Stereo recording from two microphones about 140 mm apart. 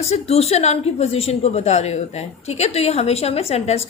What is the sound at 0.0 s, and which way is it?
A woman's voice, 50° left (ahead or behind).